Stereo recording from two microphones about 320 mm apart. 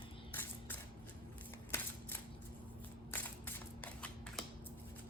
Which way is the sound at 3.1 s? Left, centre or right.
Centre.